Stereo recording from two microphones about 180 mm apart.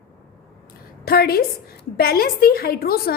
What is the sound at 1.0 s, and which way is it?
A woman's voice, 60° left (ahead or behind).